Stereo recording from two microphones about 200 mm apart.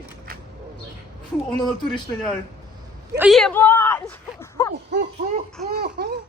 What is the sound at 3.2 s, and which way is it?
Speech, centre (ahead or behind).